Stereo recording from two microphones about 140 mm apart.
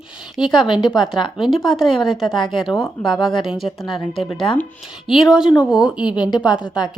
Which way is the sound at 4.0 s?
35° left (ahead or behind).